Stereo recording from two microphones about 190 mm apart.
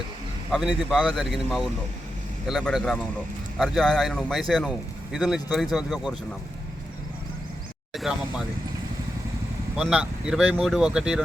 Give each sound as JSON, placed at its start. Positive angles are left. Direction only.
{"t": 0.5, "sound": "speech", "side_deg": 0}
{"t": 7.9, "sound": "speech", "side_deg": 0}
{"t": 9.7, "sound": "speech", "side_deg": -5}